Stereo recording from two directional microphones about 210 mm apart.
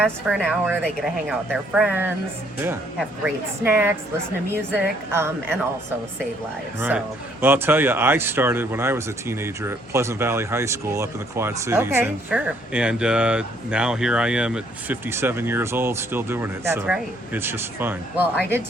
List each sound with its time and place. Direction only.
0.0 s speech: centre (ahead or behind)
6.7 s speech: 10° right (ahead or behind)